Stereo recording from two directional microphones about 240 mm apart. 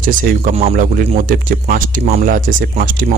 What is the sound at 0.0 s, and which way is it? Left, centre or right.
Speech, right.